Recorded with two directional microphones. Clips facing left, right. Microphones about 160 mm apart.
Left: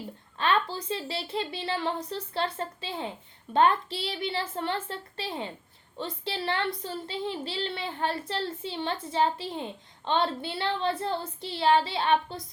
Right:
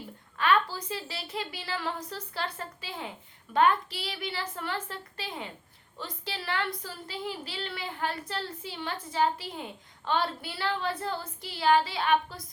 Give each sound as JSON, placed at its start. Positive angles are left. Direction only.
{"t": 0.3, "sound": "a child's voice", "side_deg": 30}